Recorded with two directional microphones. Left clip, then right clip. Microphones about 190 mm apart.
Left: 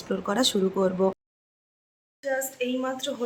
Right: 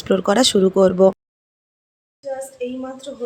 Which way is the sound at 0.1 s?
30° right (ahead or behind).